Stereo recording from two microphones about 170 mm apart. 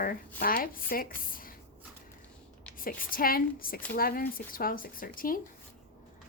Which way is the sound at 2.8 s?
55° left (ahead or behind).